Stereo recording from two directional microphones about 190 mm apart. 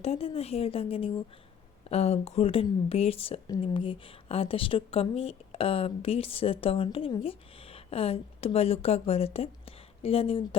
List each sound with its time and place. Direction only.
0.0 s a woman's voice: 30° left (ahead or behind)